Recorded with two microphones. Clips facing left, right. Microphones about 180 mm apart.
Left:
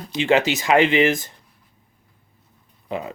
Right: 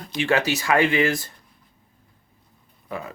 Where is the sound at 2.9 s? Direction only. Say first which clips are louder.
Left 4 dB; 20° left (ahead or behind).